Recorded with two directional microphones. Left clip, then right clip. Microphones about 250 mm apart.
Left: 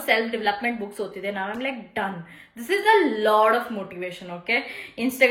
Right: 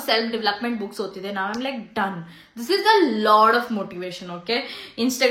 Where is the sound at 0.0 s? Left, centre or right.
Centre.